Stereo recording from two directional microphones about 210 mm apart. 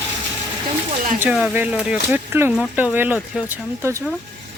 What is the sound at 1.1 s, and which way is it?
Speech, 5° right (ahead or behind).